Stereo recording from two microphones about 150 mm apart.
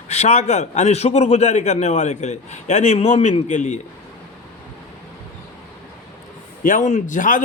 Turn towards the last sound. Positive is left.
turn(degrees=60)  # may be behind; listen again after turning